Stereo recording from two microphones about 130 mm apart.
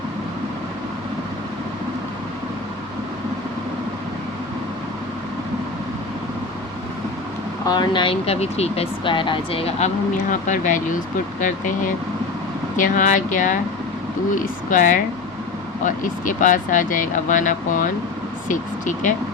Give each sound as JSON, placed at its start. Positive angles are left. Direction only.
{"t": 7.7, "sound": "speech", "side_deg": 35}
{"t": 10.4, "sound": "speech", "side_deg": 75}
{"t": 12.7, "sound": "speech", "side_deg": 75}
{"t": 14.3, "sound": "speech", "side_deg": 90}